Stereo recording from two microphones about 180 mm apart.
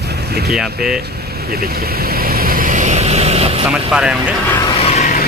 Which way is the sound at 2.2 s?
55° right (ahead or behind).